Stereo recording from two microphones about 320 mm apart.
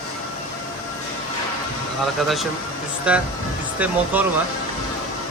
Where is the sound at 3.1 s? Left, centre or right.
Centre.